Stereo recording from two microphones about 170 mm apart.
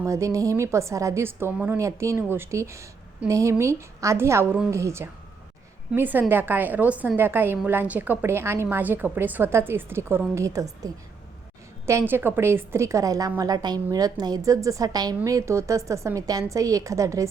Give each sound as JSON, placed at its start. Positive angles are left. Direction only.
{"t": 0.0, "sound": "a woman's voice", "side_deg": -15}